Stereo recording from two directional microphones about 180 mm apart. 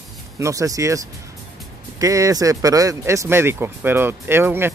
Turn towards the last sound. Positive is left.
turn(degrees=-10)  # may be behind; listen again after turning